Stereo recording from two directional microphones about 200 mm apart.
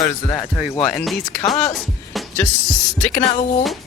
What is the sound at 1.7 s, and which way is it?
Music, centre (ahead or behind).